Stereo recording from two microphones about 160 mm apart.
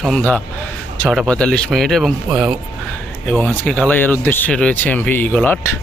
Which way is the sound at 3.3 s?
10° left (ahead or behind).